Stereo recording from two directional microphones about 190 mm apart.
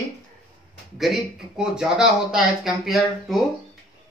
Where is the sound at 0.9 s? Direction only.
Centre (ahead or behind).